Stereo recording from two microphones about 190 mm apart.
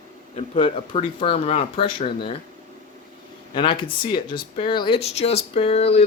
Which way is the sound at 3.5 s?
25° left (ahead or behind).